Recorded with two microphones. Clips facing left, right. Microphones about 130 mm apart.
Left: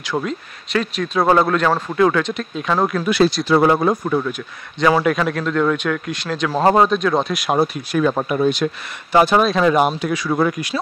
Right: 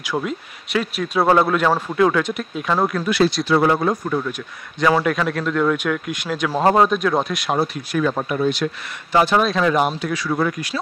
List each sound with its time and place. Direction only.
0.0 s speech: 10° right (ahead or behind)
3.4 s speech: 25° left (ahead or behind)
3.9 s speech: 10° left (ahead or behind)
7.3 s speech: 10° left (ahead or behind)
7.9 s speech: 25° left (ahead or behind)